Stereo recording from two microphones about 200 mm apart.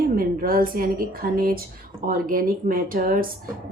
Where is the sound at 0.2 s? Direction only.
45° right (ahead or behind).